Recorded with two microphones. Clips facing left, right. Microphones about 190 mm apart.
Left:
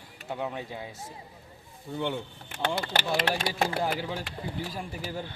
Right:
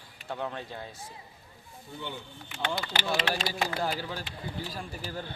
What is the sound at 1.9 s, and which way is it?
Speech, 75° left (ahead or behind).